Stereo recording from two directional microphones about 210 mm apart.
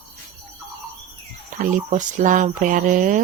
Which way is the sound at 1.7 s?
35° right (ahead or behind).